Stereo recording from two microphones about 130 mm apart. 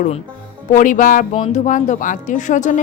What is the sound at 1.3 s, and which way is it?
Speech, 65° left (ahead or behind).